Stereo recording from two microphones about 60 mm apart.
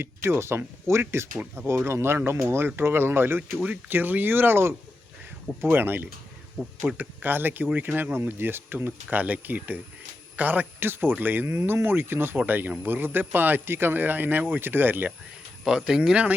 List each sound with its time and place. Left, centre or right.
0.0 s a man's voice: right
15.6 s speech: centre